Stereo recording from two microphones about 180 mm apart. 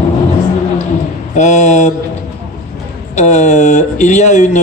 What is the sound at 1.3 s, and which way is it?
Speech, 40° left (ahead or behind).